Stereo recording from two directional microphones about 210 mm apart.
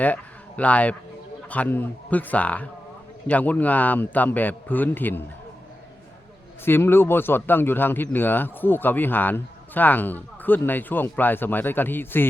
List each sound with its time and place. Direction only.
0.0 s speech: 5° left (ahead or behind)
6.7 s speech: 10° left (ahead or behind)